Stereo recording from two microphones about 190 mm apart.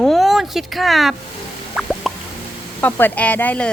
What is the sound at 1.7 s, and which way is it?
Plop, centre (ahead or behind).